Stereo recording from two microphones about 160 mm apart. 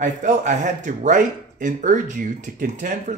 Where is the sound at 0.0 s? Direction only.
50° right (ahead or behind).